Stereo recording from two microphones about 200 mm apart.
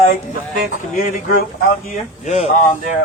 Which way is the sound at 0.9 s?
45° left (ahead or behind).